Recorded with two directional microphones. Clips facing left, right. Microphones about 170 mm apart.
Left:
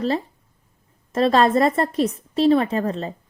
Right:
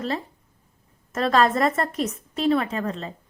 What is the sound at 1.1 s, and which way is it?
A woman's voice, 30° left (ahead or behind).